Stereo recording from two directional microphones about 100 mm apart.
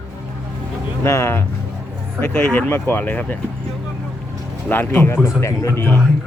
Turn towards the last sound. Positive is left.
turn(degrees=25)  # may be behind; listen again after turning